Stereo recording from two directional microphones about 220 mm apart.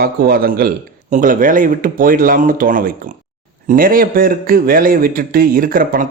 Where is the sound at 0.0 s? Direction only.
40° right (ahead or behind).